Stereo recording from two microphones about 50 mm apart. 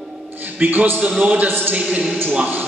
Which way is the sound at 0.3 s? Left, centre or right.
Right.